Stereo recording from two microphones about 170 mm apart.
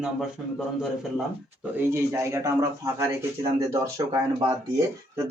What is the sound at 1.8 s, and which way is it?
A man's voice, 15° right (ahead or behind).